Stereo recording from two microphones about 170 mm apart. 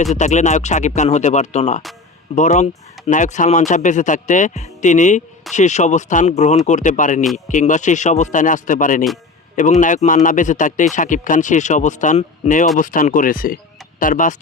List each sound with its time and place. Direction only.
0.0 s speech: 45° left (ahead or behind)